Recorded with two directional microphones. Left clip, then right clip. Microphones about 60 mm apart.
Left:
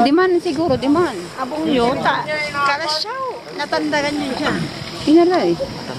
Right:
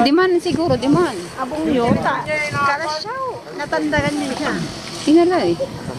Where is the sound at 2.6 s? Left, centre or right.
Left.